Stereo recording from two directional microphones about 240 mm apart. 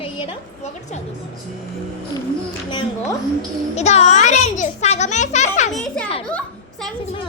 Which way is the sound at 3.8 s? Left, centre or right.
Left.